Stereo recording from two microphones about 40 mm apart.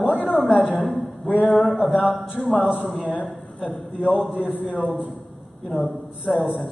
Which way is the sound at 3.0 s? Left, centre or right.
Centre.